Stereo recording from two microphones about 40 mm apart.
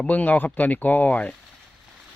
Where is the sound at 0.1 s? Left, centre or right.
Left.